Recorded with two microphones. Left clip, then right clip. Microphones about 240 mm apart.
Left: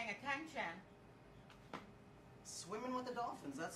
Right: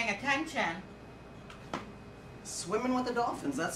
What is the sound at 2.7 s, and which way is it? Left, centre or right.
Speech, left.